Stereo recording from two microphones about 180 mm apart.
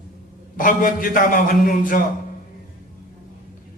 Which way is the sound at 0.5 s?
50° left (ahead or behind).